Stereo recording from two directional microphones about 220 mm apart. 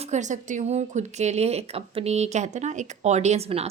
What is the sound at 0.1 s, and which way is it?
Speech, 35° right (ahead or behind).